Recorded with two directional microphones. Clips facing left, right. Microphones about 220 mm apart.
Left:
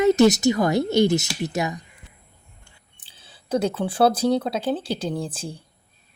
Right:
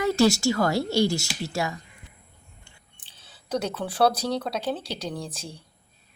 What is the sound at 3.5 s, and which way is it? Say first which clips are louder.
Speech: left 5 dB; 30° left (ahead or behind).